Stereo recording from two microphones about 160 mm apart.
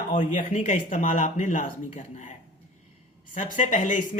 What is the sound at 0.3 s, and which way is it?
A woman's voice, 55° left (ahead or behind).